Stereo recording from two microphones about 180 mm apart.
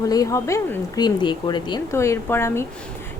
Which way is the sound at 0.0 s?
20° left (ahead or behind).